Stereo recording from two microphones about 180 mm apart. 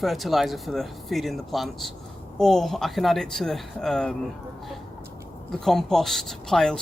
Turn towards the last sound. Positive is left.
turn(degrees=5)  # may be behind; listen again after turning